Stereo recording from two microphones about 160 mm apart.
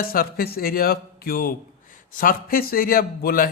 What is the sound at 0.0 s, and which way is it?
A man's voice, 65° left (ahead or behind).